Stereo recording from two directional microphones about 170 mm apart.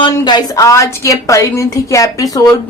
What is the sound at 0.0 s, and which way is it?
A woman's voice, 25° left (ahead or behind).